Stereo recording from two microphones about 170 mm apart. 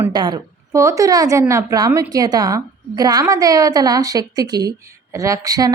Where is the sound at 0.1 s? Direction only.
25° right (ahead or behind).